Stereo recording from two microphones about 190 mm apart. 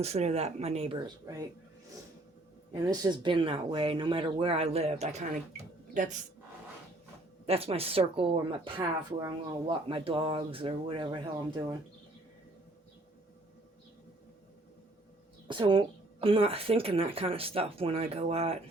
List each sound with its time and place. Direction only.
0.0 s a woman's voice: 35° right (ahead or behind)
2.7 s speech: 20° right (ahead or behind); by 6.1 s 40° right (ahead or behind)
7.4 s a woman's voice: 30° right (ahead or behind)
15.4 s speech: 25° right (ahead or behind)